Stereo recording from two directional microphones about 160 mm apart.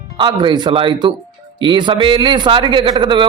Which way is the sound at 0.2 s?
30° right (ahead or behind).